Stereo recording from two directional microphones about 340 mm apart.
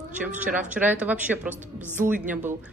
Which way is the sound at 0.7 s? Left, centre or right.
Centre.